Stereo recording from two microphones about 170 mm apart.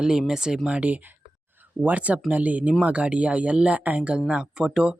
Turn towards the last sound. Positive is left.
turn(degrees=-5)  # may be behind; listen again after turning